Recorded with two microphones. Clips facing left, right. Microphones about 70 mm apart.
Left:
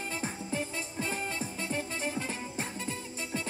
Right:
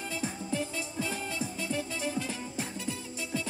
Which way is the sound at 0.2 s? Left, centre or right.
Left.